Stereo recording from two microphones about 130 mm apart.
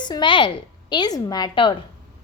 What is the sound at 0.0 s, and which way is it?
A woman's voice, 35° left (ahead or behind).